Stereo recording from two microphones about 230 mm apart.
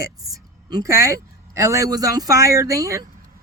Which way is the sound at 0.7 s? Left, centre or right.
Centre.